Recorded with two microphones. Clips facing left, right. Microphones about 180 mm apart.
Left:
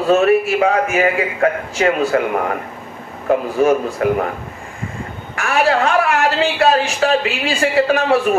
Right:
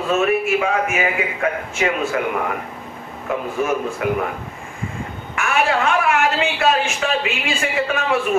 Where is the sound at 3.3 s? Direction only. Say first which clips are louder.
Left 7 dB; 35° left (ahead or behind).